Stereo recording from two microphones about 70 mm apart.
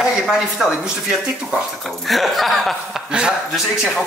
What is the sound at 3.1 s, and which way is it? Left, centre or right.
Speech, centre.